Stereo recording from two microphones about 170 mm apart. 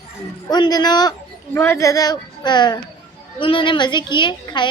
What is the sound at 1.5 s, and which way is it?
A woman's voice, 15° left (ahead or behind).